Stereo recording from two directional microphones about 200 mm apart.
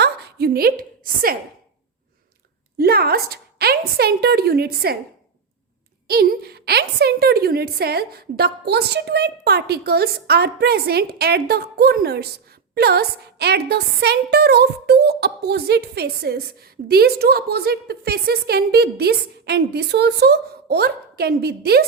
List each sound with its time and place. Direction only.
0.0 s a woman's voice: 55° right (ahead or behind)
2.7 s a woman's voice: 50° right (ahead or behind)
6.1 s a woman's voice: 50° right (ahead or behind)